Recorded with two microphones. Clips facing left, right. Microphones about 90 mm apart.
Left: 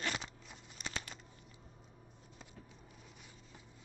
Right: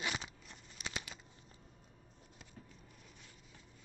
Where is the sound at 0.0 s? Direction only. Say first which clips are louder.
Left 1 dB; 5° right (ahead or behind).